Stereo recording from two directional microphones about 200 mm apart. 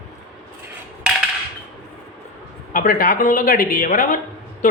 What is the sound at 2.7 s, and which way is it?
A man's voice, 45° left (ahead or behind).